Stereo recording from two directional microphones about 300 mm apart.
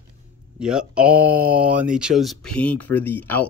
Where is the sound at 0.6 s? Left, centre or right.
Centre.